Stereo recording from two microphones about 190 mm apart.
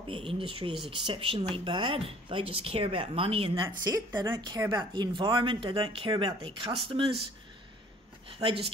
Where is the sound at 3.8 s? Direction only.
15° right (ahead or behind).